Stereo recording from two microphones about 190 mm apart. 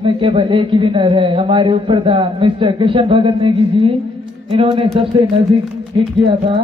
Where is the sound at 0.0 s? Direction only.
25° right (ahead or behind).